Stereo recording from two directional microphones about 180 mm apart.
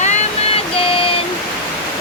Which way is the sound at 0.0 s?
35° left (ahead or behind).